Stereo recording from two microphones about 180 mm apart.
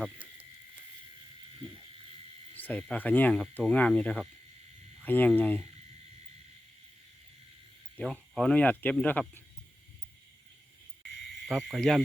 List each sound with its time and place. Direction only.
0.0 s a sound: 5° right (ahead or behind)
2.6 s speech: 10° left (ahead or behind)
7.9 s speech: 5° left (ahead or behind)
11.4 s speech: centre (ahead or behind)